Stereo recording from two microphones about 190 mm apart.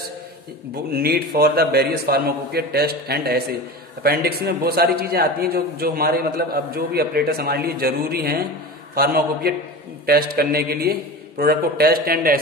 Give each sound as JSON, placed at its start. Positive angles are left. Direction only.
{"t": 0.9, "sound": "a man's voice", "side_deg": -55}